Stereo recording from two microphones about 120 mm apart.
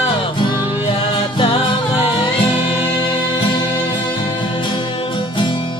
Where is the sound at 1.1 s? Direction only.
45° left (ahead or behind).